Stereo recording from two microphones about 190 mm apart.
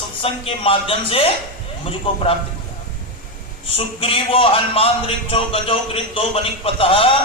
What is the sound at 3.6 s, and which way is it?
A man's voice, 30° left (ahead or behind).